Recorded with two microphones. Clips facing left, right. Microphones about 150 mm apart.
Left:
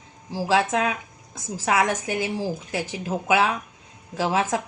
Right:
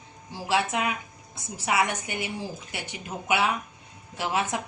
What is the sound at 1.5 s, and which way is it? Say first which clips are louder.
A woman's voice: left 4 dB; 90° left.